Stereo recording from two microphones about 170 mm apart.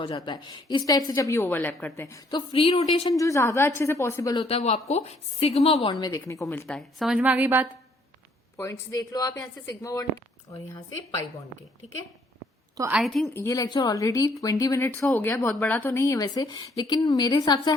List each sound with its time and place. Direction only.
0.0 s speech: 25° left (ahead or behind)
2.5 s a woman's voice: 35° left (ahead or behind)
3.2 s a woman's voice: 20° left (ahead or behind)
4.4 s a woman's voice: 35° left (ahead or behind); by 6.7 s 15° left (ahead or behind)
6.7 s a woman's voice: centre (ahead or behind)
8.5 s speech: 15° left (ahead or behind)
12.9 s a woman's voice: centre (ahead or behind)
13.3 s speech: 20° left (ahead or behind)